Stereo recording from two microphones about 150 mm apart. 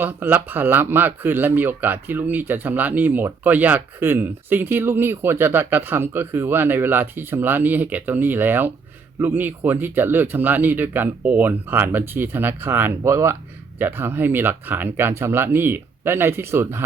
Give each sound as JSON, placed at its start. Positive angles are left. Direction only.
{"t": 0.0, "sound": "speech", "side_deg": -15}